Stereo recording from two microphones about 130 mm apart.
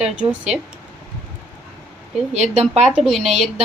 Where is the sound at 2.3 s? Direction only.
60° right (ahead or behind).